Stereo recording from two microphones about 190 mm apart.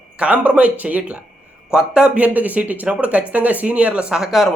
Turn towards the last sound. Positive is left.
turn(degrees=0)  # may be behind; listen again after turning